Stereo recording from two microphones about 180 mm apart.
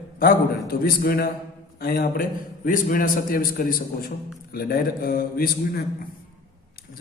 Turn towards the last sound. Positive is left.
turn(degrees=55)  # may be behind; listen again after turning